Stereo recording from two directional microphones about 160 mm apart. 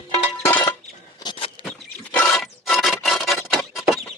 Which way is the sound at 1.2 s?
30° left (ahead or behind).